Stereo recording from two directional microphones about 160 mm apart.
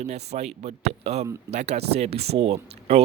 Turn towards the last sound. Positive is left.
turn(degrees=-40)  # may be behind; listen again after turning